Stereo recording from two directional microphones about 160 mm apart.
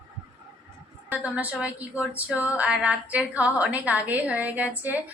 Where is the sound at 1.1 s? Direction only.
10° right (ahead or behind).